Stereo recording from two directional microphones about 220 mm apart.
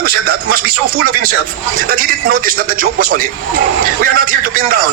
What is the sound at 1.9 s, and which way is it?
A man's voice, 40° right (ahead or behind).